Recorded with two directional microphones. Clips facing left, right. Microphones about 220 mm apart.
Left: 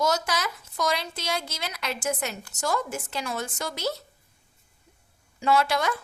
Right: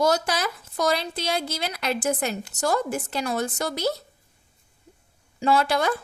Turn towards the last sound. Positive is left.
turn(degrees=-35)  # may be behind; listen again after turning